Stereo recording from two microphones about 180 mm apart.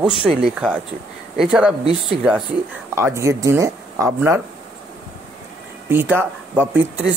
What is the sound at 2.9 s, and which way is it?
Speech, 15° right (ahead or behind).